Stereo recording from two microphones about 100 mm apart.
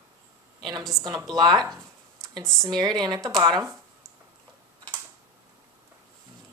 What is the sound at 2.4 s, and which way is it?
Speech, 5° left (ahead or behind).